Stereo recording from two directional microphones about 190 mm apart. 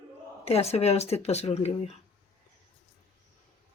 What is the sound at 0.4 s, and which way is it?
Speech, 35° left (ahead or behind).